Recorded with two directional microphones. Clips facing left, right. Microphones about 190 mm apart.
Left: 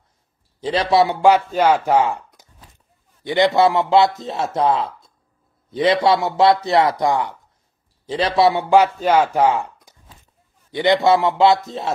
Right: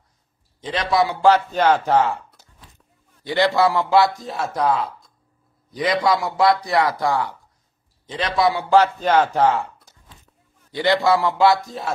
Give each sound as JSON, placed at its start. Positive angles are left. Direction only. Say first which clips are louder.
{"t": 0.6, "sound": "a man's voice", "louder": "left 4 dB", "side_deg": 30}
{"t": 1.2, "sound": "a man's voice", "louder": "left 2 dB", "side_deg": 10}
{"t": 8.4, "sound": "a man's voice", "louder": "left 2 dB", "side_deg": 20}